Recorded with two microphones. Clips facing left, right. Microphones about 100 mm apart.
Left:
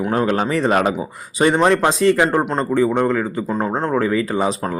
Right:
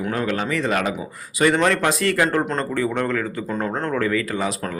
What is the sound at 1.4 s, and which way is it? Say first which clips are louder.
A man's voice: left 3 dB; 25° left (ahead or behind).